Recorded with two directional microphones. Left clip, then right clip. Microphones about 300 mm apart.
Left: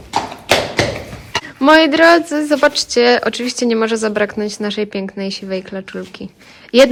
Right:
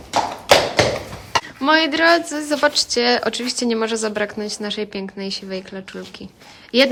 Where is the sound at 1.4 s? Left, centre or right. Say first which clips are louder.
Left 8 dB; centre.